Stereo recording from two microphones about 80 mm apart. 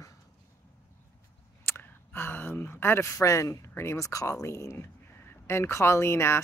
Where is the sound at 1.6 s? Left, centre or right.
Left.